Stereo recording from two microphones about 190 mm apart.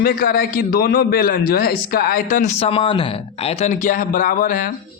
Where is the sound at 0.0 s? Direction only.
50° left (ahead or behind).